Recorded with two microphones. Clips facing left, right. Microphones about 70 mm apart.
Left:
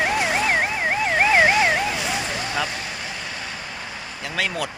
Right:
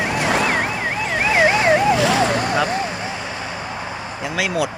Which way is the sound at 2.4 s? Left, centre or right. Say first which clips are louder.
Right 7 dB; right.